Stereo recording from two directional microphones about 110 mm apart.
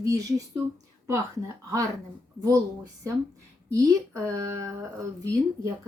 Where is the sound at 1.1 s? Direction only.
30° right (ahead or behind).